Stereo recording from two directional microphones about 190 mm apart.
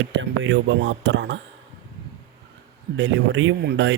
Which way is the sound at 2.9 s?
80° right.